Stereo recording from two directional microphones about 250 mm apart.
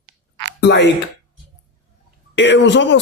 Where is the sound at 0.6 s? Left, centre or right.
Left.